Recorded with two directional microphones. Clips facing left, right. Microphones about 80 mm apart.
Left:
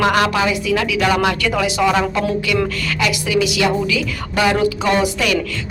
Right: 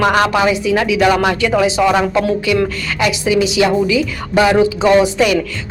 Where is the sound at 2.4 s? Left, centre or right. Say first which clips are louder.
Right 3 dB; right.